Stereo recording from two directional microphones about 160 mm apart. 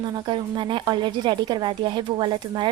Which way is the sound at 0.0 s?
25° right (ahead or behind).